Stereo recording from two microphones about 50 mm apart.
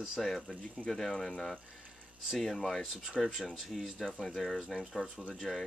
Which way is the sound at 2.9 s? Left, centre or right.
Centre.